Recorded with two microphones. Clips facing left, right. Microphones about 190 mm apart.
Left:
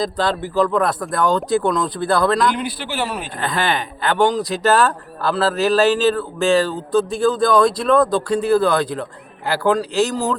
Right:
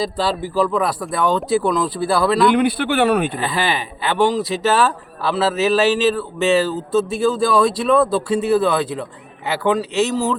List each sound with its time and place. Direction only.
0.0 s speech: 5° right (ahead or behind)
2.5 s speech: 60° right (ahead or behind)
3.3 s speech: 5° right (ahead or behind)